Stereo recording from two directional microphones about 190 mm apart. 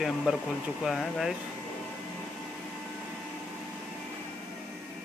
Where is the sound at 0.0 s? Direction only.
5° right (ahead or behind).